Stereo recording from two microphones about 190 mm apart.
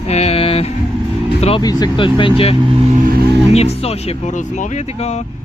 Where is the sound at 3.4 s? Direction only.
35° left (ahead or behind).